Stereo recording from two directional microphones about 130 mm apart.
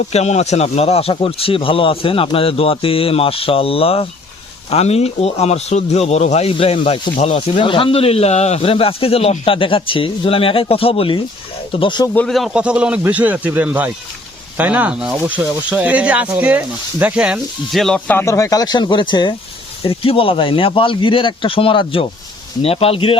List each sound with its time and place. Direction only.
0.1 s speech: 55° left (ahead or behind); by 12.0 s 40° left (ahead or behind)
12.1 s speech: 5° left (ahead or behind)
18.2 s speech: 25° left (ahead or behind); by 23.1 s 45° left (ahead or behind)